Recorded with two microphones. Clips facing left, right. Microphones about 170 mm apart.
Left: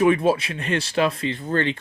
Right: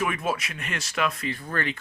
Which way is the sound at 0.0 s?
30° left (ahead or behind).